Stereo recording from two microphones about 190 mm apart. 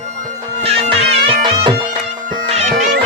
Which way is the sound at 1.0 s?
60° right (ahead or behind).